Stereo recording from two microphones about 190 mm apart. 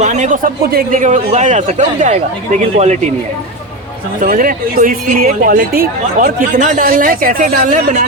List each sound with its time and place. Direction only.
0.0 s a sound: 40° right (ahead or behind)
0.6 s speech: 45° right (ahead or behind)
4.2 s speech: 45° right (ahead or behind)